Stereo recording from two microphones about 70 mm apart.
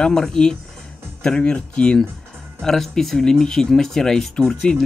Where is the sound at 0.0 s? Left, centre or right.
Centre.